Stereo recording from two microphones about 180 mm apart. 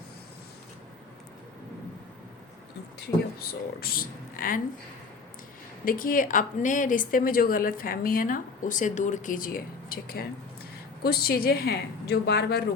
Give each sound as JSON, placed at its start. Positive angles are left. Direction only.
{"t": 3.4, "sound": "speech", "side_deg": 55}
{"t": 5.8, "sound": "speech", "side_deg": 50}